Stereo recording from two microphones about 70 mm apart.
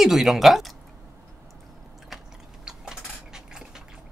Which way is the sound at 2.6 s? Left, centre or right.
Centre.